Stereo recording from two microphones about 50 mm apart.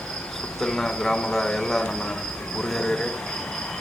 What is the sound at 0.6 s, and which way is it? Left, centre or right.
Speech, centre.